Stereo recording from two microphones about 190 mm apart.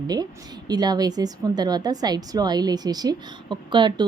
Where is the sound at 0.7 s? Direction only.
20° right (ahead or behind).